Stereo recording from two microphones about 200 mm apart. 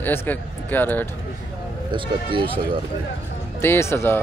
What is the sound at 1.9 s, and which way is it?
Speech, 25° right (ahead or behind).